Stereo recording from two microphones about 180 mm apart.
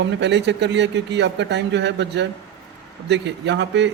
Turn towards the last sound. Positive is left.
turn(degrees=-75)  # may be behind; listen again after turning